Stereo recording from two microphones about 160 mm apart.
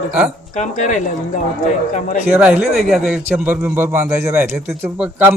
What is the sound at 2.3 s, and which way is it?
A man's voice, 10° right (ahead or behind).